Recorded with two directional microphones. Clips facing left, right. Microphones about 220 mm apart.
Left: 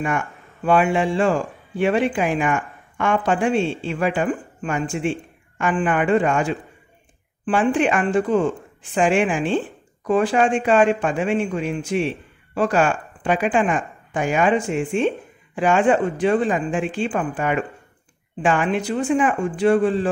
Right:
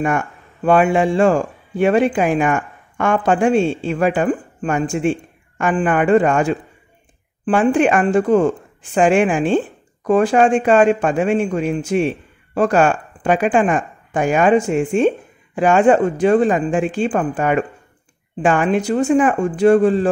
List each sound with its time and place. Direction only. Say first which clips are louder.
0.7 s a woman's voice: right 4 dB; 45° right (ahead or behind)